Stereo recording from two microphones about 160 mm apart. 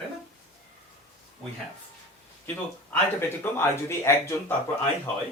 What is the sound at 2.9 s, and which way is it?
Speech, 15° left (ahead or behind).